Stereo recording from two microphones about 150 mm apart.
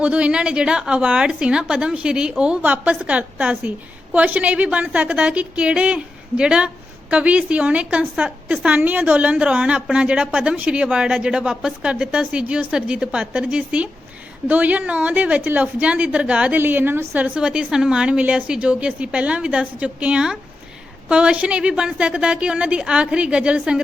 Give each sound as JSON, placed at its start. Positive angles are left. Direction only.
{"t": 0.0, "sound": "a woman's voice", "side_deg": -10}